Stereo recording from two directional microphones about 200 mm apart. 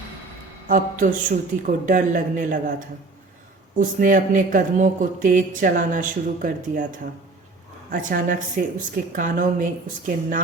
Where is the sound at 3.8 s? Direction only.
40° right (ahead or behind).